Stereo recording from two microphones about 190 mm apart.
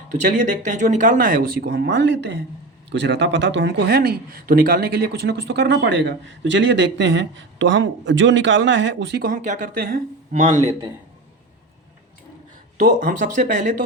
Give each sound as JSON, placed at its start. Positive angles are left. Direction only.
{"t": 0.1, "sound": "a man's voice", "side_deg": -40}
{"t": 12.8, "sound": "speech", "side_deg": -45}